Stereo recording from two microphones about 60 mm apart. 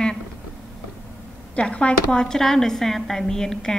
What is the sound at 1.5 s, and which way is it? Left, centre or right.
A woman's voice, centre.